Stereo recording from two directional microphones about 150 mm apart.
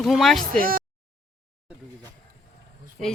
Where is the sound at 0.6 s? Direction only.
70° right (ahead or behind).